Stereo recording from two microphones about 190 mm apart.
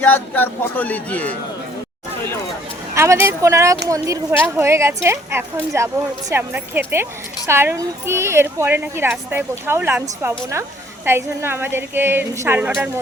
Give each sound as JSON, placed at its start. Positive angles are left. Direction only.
{"t": 0.0, "sound": "speech", "side_deg": 10}
{"t": 2.9, "sound": "speech", "side_deg": -15}